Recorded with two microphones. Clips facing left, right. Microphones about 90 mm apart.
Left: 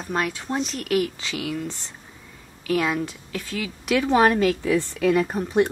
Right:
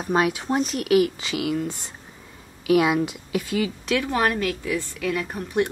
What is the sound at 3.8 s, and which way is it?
Speech, 20° left (ahead or behind).